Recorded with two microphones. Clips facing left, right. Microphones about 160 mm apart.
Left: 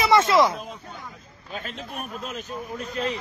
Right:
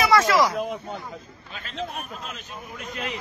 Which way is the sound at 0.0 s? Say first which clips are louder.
Left 1 dB; 25° left (ahead or behind).